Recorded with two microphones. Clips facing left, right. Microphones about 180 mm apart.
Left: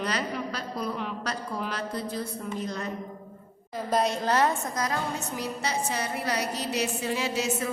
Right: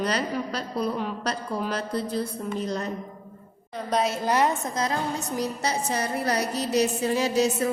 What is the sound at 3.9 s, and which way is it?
Speech, centre (ahead or behind).